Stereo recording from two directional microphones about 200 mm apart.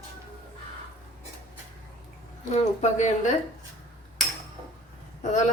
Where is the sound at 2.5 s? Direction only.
35° left (ahead or behind).